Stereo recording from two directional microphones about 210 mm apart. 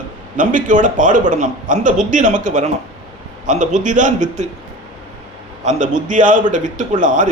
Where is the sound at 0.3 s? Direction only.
40° right (ahead or behind).